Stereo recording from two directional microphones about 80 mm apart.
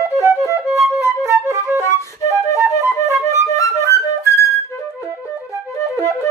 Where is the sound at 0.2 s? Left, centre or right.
Right.